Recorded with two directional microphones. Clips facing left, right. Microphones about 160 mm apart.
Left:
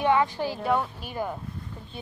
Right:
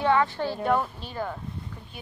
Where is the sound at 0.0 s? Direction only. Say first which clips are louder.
Even; 15° left (ahead or behind).